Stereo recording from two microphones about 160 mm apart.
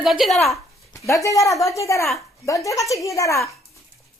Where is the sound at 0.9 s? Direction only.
20° left (ahead or behind).